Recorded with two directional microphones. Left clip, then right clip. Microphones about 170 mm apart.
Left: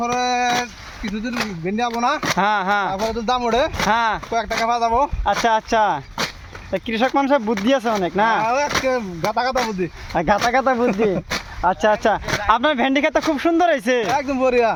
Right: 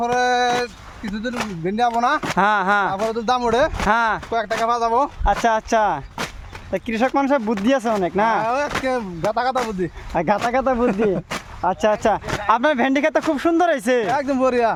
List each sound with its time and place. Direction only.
0.2 s a sound: 10° right (ahead or behind)
1.6 s speech: 10° right (ahead or behind)
10.2 s speech: 15° right (ahead or behind)